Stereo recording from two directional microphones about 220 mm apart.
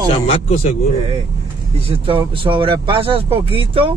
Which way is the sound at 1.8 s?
25° right (ahead or behind).